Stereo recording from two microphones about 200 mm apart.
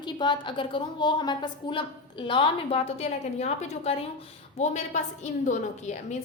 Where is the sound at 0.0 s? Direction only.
20° left (ahead or behind).